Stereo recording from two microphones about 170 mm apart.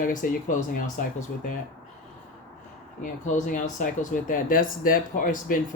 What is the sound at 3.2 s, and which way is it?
Speech, 50° left (ahead or behind).